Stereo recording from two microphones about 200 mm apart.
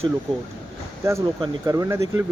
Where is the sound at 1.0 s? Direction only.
15° right (ahead or behind).